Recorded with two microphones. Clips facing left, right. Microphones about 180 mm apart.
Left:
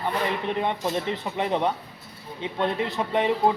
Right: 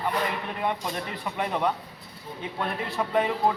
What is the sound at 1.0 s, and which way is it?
A man's voice, 25° left (ahead or behind).